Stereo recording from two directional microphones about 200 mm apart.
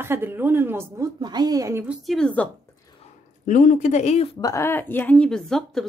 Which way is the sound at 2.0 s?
5° left (ahead or behind).